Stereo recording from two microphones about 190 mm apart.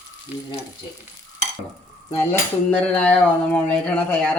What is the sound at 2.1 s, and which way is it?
Cutlery, 10° left (ahead or behind).